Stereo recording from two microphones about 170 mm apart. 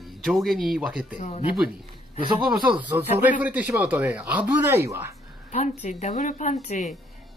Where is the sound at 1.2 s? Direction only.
35° left (ahead or behind).